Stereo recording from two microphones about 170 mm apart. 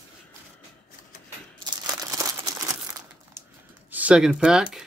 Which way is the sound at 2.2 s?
20° right (ahead or behind).